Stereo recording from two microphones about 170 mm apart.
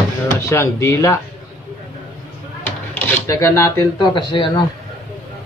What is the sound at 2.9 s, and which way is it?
Speech, 15° left (ahead or behind).